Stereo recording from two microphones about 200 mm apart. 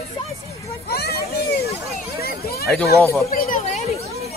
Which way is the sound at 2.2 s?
50° left (ahead or behind).